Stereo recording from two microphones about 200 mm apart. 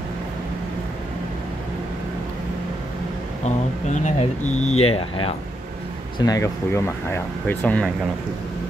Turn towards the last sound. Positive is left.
turn(degrees=10)  # may be behind; listen again after turning